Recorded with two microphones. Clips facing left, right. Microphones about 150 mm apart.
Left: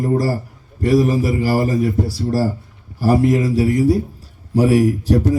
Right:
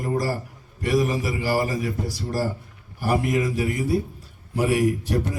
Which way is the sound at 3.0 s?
35° left (ahead or behind).